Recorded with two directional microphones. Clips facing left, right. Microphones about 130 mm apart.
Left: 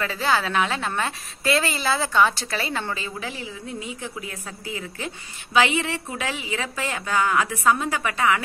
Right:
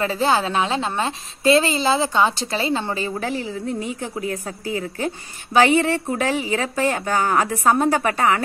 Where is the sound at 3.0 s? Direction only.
45° right (ahead or behind).